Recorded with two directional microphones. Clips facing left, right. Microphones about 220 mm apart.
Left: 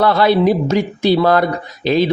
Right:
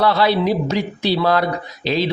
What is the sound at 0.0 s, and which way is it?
Speech, 50° left (ahead or behind).